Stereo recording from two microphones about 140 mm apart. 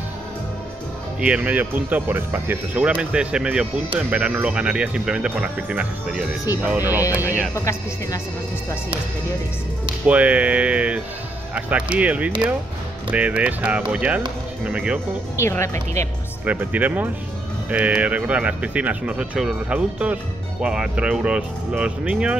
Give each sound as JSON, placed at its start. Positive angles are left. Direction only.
{"t": 1.2, "sound": "speech", "side_deg": -10}
{"t": 7.5, "sound": "speech", "side_deg": 25}
{"t": 10.0, "sound": "speech", "side_deg": -10}
{"t": 15.4, "sound": "speech", "side_deg": 20}
{"t": 16.4, "sound": "speech", "side_deg": -10}